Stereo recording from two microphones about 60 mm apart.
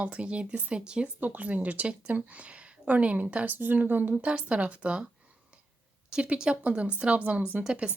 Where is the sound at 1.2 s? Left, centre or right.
Right.